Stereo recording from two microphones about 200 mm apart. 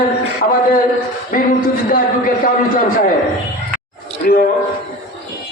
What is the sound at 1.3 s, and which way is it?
Music, 45° left (ahead or behind).